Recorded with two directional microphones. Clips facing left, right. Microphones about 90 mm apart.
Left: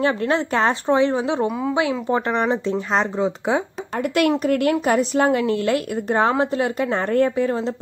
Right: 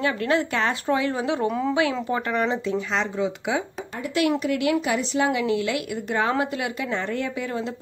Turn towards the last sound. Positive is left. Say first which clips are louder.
# left 8 dB
turn(degrees=35)  # may be behind; listen again after turning